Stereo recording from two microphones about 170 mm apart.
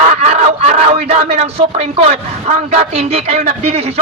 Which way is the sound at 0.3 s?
40° right (ahead or behind).